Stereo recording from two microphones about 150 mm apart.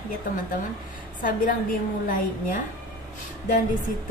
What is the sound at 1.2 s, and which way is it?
A woman's voice, 65° left (ahead or behind).